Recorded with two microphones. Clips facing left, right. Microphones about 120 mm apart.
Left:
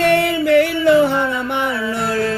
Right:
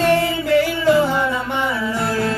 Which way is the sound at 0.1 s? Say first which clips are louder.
Left 2 dB; 65° left (ahead or behind).